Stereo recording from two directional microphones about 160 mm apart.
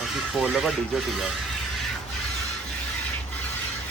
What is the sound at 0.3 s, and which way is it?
Speech, centre (ahead or behind).